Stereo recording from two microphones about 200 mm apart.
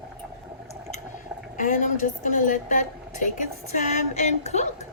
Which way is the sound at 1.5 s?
40° left (ahead or behind).